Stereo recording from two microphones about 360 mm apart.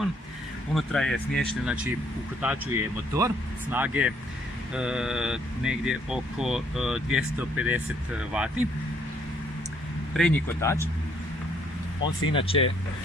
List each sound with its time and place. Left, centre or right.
0.7 s speech: centre
10.2 s speech: centre
12.3 s speech: centre